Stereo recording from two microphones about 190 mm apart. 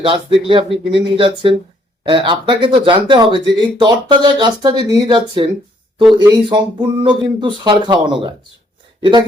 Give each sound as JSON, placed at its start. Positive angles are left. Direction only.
{"t": 0.0, "sound": "speech", "side_deg": -25}